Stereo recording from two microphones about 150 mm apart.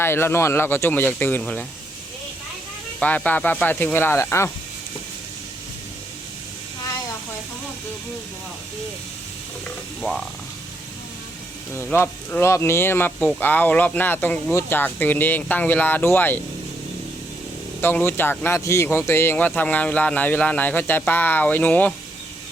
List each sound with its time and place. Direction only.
0.0 s speech: 15° left (ahead or behind)
3.0 s speech: 10° left (ahead or behind)
10.0 s speech: centre (ahead or behind)
11.7 s speech: 15° left (ahead or behind)
17.7 s speech: 15° left (ahead or behind)